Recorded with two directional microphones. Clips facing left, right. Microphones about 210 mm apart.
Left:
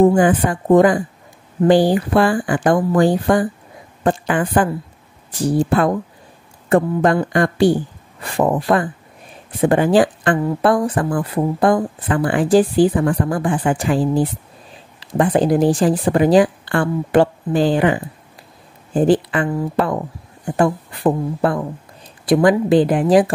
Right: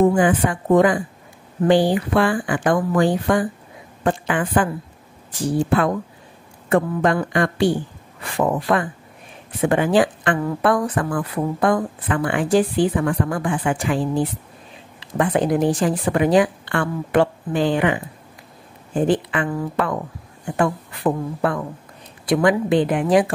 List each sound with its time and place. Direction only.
0.0 s speech: 40° left (ahead or behind)
5.7 s speech: 40° left (ahead or behind)